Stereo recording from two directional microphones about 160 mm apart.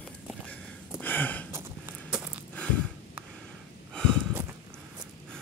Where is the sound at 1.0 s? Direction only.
10° left (ahead or behind).